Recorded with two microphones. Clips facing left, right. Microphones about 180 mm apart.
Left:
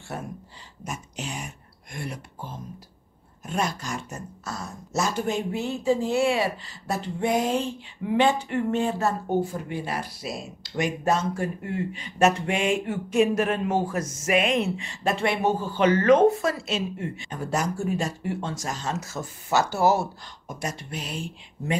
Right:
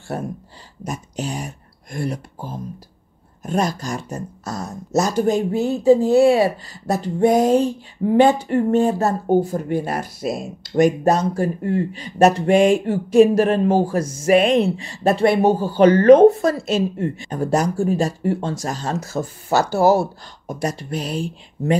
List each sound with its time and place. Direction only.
0.1 s speech: 40° right (ahead or behind)